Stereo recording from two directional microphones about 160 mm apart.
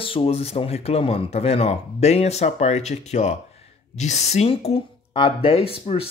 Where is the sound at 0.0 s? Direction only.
35° left (ahead or behind).